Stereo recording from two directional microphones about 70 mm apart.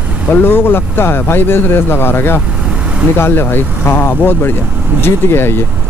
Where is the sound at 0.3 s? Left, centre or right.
Left.